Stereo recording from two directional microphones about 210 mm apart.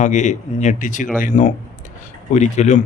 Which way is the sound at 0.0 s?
35° left (ahead or behind).